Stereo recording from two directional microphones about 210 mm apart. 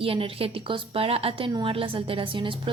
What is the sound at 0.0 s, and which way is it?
Speech, 25° right (ahead or behind).